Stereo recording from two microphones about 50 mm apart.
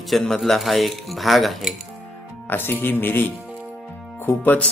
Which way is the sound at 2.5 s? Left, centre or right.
Left.